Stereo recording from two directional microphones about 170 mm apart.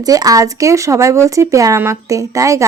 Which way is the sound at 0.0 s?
20° right (ahead or behind).